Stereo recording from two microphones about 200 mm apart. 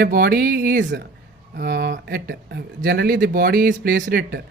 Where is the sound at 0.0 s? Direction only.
45° right (ahead or behind).